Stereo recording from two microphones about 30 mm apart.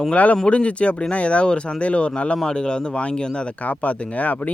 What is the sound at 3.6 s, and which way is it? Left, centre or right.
Speech, left.